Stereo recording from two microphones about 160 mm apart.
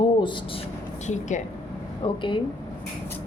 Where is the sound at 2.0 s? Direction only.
30° left (ahead or behind).